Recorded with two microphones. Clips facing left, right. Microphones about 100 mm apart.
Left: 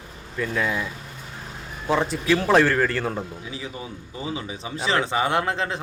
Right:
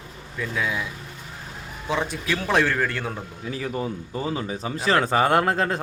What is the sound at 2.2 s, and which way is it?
Speech, 10° left (ahead or behind).